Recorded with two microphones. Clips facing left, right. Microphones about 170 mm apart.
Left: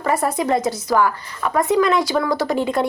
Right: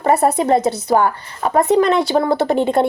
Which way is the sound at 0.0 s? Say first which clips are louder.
Right 5 dB; 30° right (ahead or behind).